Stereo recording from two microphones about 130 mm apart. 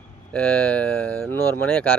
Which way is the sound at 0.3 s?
10° left (ahead or behind).